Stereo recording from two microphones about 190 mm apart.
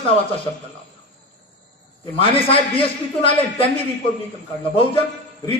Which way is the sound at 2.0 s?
30° left (ahead or behind).